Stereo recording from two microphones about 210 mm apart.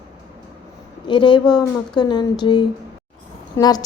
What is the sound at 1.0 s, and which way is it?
Speech, 20° left (ahead or behind).